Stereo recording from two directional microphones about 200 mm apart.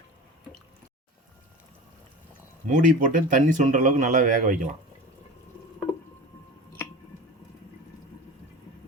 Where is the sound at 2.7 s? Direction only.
40° right (ahead or behind).